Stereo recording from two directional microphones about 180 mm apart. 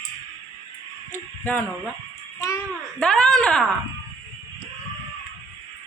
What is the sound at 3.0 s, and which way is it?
Speech, centre (ahead or behind).